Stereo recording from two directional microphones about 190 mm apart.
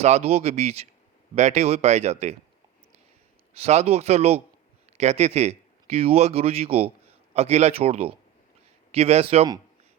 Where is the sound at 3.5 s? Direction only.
35° right (ahead or behind).